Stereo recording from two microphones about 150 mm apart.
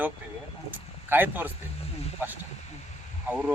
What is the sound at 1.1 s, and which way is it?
Speech, 15° right (ahead or behind).